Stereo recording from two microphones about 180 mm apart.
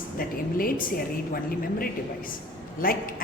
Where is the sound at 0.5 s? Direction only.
50° left (ahead or behind).